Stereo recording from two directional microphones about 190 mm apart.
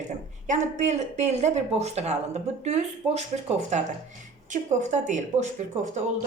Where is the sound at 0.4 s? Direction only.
40° right (ahead or behind).